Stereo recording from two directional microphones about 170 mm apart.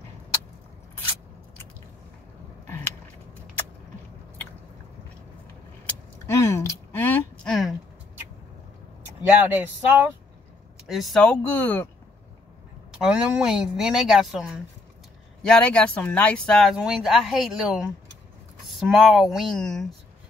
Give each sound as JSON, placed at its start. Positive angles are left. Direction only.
{"t": 6.2, "sound": "a sound", "side_deg": 15}
{"t": 9.0, "sound": "speech", "side_deg": -10}
{"t": 10.9, "sound": "speech", "side_deg": 0}
{"t": 13.0, "sound": "speech", "side_deg": -5}